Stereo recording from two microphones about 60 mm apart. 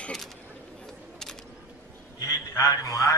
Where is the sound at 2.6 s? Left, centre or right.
Left.